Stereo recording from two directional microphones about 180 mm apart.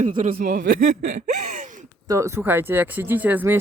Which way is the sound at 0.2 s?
50° right (ahead or behind).